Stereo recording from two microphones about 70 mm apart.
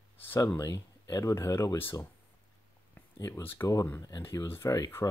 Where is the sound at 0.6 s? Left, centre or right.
Left.